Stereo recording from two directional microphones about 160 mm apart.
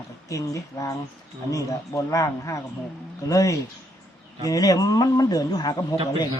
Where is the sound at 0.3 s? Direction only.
20° left (ahead or behind).